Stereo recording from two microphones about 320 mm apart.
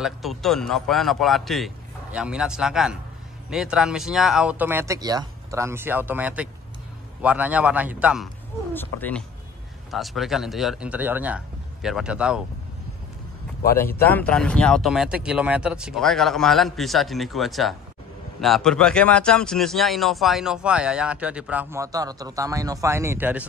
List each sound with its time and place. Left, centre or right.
0.0 s speech: centre
13.7 s speech: centre